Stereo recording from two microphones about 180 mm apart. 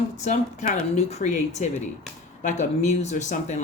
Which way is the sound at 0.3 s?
40° left (ahead or behind).